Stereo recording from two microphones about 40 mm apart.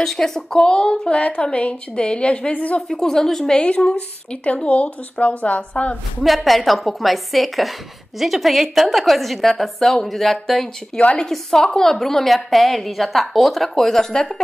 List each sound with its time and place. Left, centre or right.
0.0 s a woman's voice: centre
0.6 s speech: left
1.2 s a woman's voice: left
2.9 s a woman's voice: centre
3.5 s speech: left
6.2 s a woman's voice: centre
11.0 s speech: left
11.2 s a woman's voice: centre